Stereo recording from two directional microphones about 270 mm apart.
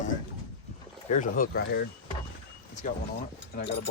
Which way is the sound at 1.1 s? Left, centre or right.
Left.